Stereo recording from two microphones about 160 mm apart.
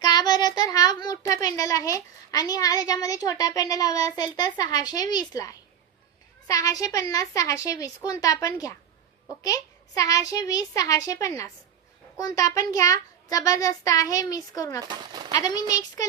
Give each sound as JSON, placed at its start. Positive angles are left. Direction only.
{"t": 0.0, "sound": "a child's voice", "side_deg": 25}
{"t": 14.8, "sound": "speech", "side_deg": -25}
{"t": 15.4, "sound": "a child's voice", "side_deg": 25}